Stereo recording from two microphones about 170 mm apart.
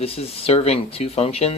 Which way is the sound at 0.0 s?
35° left (ahead or behind).